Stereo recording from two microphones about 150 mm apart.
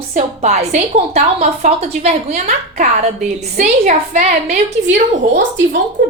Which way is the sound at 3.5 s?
55° right (ahead or behind).